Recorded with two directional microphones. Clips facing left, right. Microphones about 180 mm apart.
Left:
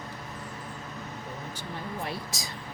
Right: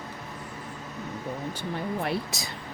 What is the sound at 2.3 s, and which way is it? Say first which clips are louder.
Speech: right 2 dB; 65° right (ahead or behind).